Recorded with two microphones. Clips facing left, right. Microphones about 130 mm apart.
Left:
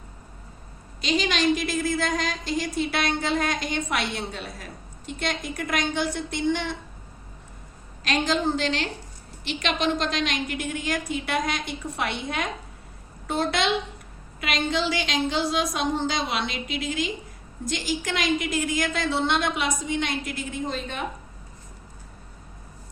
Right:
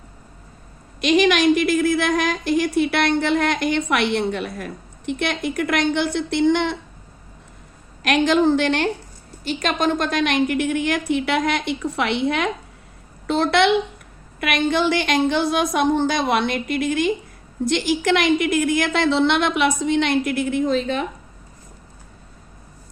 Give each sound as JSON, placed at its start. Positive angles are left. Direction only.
{"t": 1.0, "sound": "a woman's voice", "side_deg": -70}
{"t": 8.0, "sound": "a woman's voice", "side_deg": -65}
{"t": 9.4, "sound": "a woman's voice", "side_deg": -45}
{"t": 17.7, "sound": "a woman's voice", "side_deg": -65}